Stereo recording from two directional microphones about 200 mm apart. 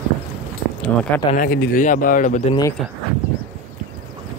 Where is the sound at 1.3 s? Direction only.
45° left (ahead or behind).